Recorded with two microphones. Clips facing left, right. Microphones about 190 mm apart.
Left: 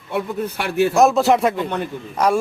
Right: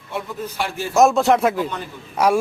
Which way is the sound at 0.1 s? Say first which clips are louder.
Left 5 dB; 60° left (ahead or behind).